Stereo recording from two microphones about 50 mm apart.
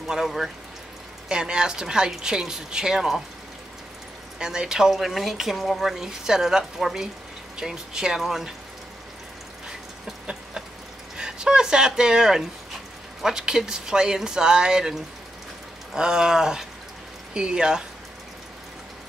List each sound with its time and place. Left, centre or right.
0.1 s a woman's voice: centre
4.4 s a woman's voice: centre
11.1 s a woman's voice: centre